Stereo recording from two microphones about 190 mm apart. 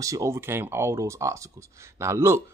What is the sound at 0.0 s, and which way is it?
Speech, 15° right (ahead or behind).